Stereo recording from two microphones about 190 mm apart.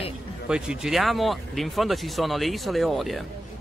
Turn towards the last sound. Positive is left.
turn(degrees=0)  # may be behind; listen again after turning